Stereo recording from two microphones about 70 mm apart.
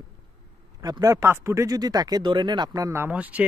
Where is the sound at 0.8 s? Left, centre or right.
Right.